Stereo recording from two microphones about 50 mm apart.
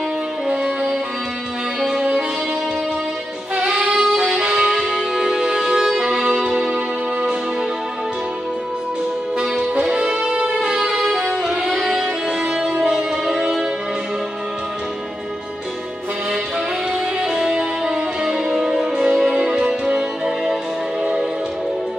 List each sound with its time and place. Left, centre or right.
1.8 s music: centre
3.5 s music: centre
9.4 s music: centre
17.2 s music: centre